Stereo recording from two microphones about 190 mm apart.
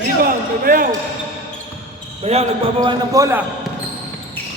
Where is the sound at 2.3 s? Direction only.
35° right (ahead or behind).